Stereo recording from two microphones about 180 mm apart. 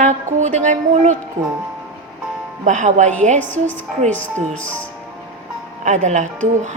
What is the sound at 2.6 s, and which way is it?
Speech, 40° right (ahead or behind).